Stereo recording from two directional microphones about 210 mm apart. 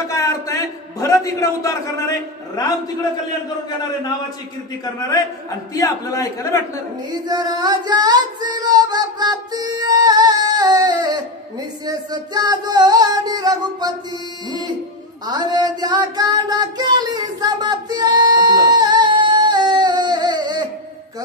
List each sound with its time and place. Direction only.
0.1 s a sound: 15° left (ahead or behind)
5.8 s a man's voice: 15° left (ahead or behind)
7.1 s child singing: 20° right (ahead or behind)
11.8 s music: 20° right (ahead or behind)
15.2 s child singing: 20° right (ahead or behind)